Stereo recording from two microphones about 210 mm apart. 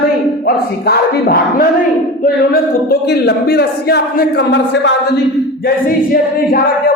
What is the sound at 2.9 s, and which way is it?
Speech, 50° left (ahead or behind).